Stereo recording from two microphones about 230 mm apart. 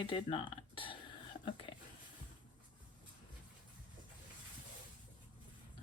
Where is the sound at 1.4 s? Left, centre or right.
Left.